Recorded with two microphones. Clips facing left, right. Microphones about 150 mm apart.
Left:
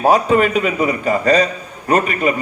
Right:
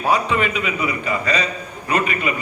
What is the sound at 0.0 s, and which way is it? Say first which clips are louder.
A man's voice: left 6 dB; 45° left (ahead or behind).